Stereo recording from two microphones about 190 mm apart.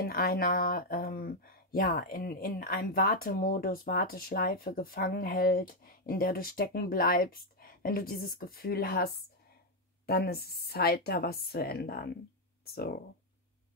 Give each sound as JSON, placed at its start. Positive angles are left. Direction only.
{"t": 0.0, "sound": "a woman's voice", "side_deg": 50}